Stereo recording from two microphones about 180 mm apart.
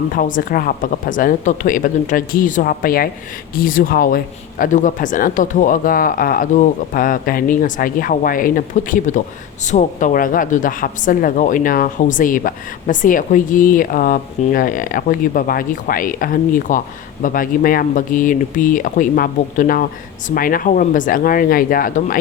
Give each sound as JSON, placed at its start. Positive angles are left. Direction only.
{"t": 0.1, "sound": "a woman's voice", "side_deg": 50}